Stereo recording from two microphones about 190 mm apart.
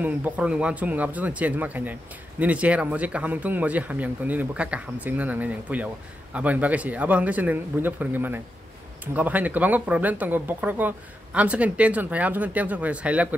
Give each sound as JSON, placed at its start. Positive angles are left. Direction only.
{"t": 0.0, "sound": "speech", "side_deg": -5}